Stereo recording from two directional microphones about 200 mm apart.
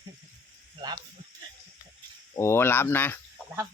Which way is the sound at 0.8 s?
20° right (ahead or behind).